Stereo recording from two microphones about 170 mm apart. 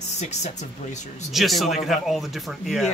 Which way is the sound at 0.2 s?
40° left (ahead or behind).